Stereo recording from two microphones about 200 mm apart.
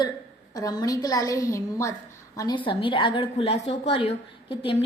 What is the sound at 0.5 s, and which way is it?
A woman's voice, 20° left (ahead or behind).